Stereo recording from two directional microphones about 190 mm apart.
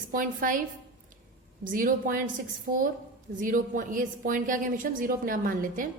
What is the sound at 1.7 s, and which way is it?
A woman's voice, 45° right (ahead or behind).